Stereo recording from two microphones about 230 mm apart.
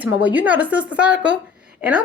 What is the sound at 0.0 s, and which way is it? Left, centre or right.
A woman's voice, centre.